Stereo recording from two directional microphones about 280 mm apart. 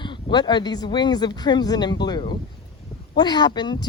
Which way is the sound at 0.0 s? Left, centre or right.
Centre.